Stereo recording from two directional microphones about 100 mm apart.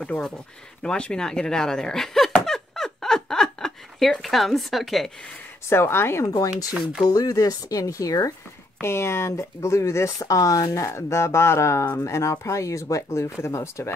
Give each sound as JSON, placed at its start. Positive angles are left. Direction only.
{"t": 0.0, "sound": "speech", "side_deg": 5}
{"t": 0.8, "sound": "chuckle", "side_deg": 10}
{"t": 5.7, "sound": "speech", "side_deg": 25}